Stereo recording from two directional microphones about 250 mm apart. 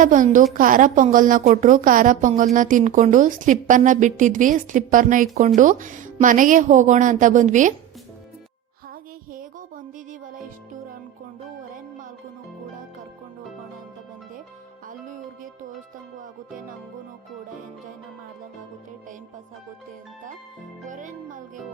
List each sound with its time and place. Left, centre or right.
0.0 s a woman's voice: right
9.3 s music: right
20.8 s music: right